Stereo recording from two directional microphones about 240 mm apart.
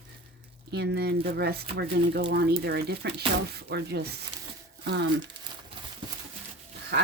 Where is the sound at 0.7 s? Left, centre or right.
Right.